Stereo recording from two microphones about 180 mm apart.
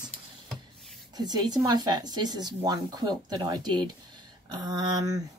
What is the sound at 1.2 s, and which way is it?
Speech, 20° right (ahead or behind).